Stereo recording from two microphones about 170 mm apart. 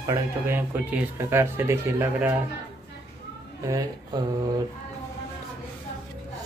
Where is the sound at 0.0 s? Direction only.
15° right (ahead or behind).